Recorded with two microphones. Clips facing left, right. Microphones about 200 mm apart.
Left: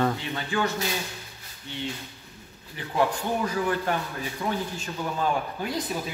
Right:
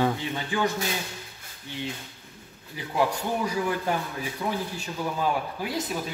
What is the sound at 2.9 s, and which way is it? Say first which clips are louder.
A man's voice: left 1 dB; 10° right (ahead or behind).